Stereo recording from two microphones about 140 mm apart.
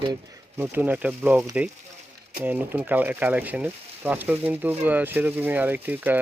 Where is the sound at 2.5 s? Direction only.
10° right (ahead or behind).